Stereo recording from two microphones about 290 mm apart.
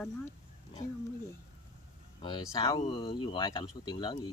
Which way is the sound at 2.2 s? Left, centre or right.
Centre.